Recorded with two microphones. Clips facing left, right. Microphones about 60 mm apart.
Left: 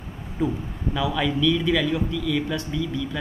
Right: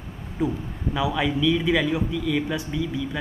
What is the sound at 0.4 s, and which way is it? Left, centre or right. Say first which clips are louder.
A man's voice: even; centre.